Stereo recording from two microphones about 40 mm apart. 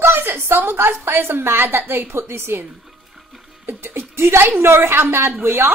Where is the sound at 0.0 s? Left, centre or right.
Right.